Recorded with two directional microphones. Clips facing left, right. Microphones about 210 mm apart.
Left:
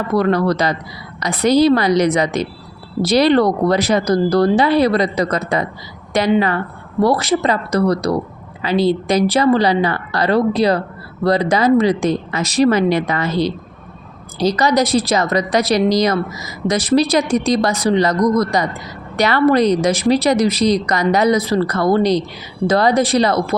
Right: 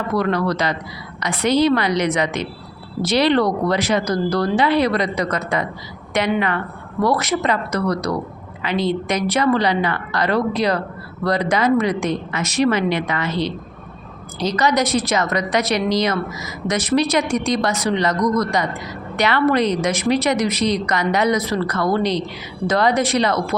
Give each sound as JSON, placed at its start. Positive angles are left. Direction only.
{"t": 0.2, "sound": "a woman's voice", "side_deg": 35}